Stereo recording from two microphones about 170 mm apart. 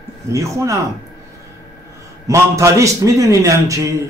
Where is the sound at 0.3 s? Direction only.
15° right (ahead or behind).